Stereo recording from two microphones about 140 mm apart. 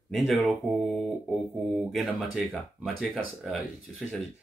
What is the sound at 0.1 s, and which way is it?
Speech, centre (ahead or behind).